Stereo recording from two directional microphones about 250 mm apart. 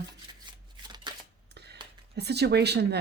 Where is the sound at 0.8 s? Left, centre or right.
Centre.